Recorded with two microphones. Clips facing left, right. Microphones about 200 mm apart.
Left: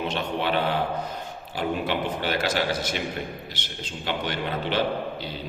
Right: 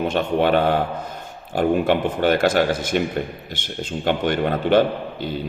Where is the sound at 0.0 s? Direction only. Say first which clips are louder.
Right 8 dB; 50° right (ahead or behind).